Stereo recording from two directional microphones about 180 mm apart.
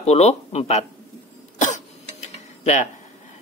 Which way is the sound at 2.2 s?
40° left (ahead or behind).